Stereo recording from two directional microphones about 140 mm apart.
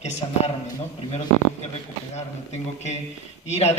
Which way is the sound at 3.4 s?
50° left (ahead or behind).